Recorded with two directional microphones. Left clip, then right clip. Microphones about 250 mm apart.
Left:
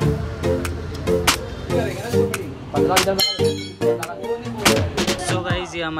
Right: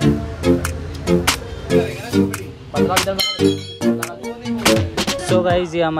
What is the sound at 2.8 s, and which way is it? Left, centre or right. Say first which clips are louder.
Clang: left 1 dB; centre.